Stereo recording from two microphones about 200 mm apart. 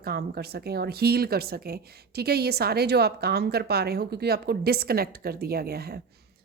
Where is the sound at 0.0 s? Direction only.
50° right (ahead or behind).